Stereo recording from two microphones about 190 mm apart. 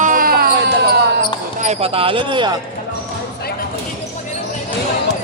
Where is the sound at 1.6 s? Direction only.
35° right (ahead or behind).